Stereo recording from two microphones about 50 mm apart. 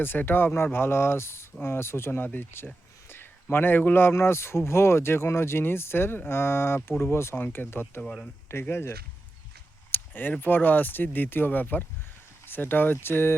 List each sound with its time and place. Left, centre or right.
0.0 s speech: left
0.5 s speech: left
4.1 s speech: left
7.3 s speech: left
9.9 s a sound: left
10.4 s speech: left